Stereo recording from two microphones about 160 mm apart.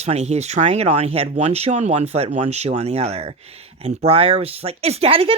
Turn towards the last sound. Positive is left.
turn(degrees=-35)  # may be behind; listen again after turning